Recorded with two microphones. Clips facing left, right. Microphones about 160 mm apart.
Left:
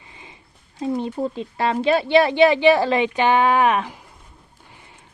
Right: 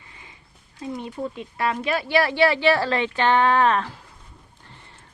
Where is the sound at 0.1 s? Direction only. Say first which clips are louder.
Left 5 dB; 20° left (ahead or behind).